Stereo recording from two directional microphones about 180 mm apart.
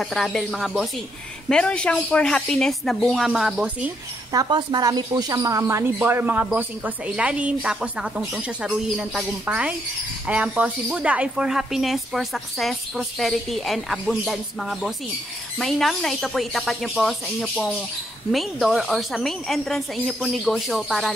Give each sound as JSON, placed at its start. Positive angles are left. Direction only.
{"t": 0.0, "sound": "speech", "side_deg": 0}
{"t": 4.3, "sound": "speech", "side_deg": -25}